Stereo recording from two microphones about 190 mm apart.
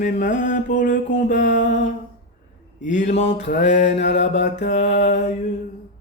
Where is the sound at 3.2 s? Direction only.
40° left (ahead or behind).